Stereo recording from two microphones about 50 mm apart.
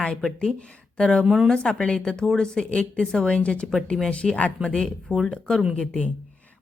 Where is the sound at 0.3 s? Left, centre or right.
Left.